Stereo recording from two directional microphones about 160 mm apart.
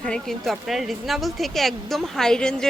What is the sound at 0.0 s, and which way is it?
A woman's voice, 5° left (ahead or behind).